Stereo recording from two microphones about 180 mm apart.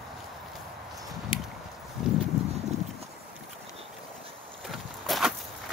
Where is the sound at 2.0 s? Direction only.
Centre (ahead or behind).